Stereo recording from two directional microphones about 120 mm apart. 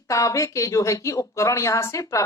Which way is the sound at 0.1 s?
25° left (ahead or behind).